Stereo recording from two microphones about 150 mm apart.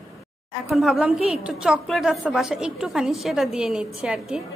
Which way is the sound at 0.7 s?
Centre (ahead or behind).